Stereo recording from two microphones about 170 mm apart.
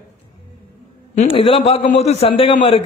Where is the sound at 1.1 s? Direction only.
35° left (ahead or behind).